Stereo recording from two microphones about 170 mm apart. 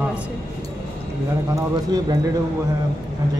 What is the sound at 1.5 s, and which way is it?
Speech, 25° right (ahead or behind).